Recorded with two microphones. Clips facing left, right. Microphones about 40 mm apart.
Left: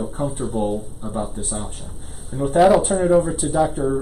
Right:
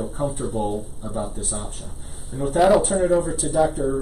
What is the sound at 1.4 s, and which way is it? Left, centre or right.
Speech, left.